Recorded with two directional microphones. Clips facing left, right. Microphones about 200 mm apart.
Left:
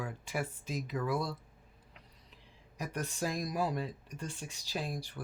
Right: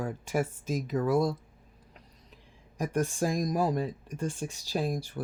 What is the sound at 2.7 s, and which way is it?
Speech, 45° right (ahead or behind).